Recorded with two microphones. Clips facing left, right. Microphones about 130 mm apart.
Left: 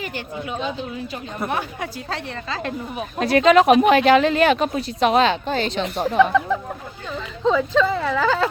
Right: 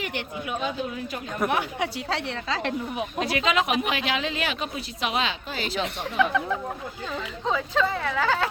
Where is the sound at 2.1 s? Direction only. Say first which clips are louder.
Even; 90° right.